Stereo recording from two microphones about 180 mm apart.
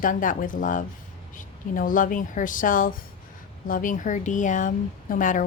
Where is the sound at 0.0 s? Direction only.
50° left (ahead or behind).